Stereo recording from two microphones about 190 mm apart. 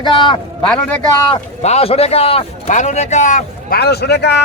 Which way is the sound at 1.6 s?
35° left (ahead or behind).